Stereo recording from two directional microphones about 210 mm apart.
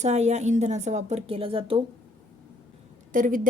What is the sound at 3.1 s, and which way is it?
Speech, 40° right (ahead or behind).